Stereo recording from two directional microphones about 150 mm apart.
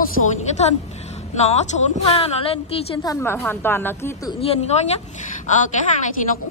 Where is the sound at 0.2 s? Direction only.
50° left (ahead or behind).